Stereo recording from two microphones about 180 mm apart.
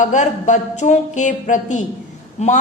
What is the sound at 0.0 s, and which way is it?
Speech, 40° left (ahead or behind).